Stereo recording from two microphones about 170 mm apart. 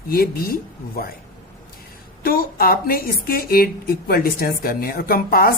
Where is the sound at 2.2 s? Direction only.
60° left (ahead or behind).